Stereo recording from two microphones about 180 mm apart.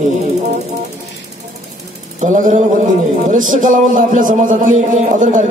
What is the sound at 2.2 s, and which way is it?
A man's voice, 45° right (ahead or behind).